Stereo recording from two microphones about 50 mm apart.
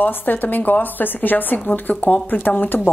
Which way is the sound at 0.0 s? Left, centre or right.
Left.